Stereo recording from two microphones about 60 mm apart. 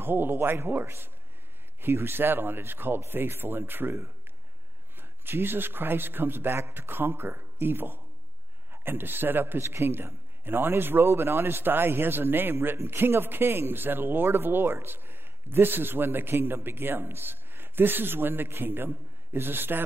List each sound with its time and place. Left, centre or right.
0.0 s a man's voice: right